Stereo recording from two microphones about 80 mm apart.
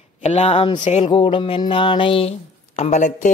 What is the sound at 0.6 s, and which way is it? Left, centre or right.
Music, left.